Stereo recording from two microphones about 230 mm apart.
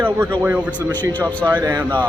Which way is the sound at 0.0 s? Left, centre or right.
Centre.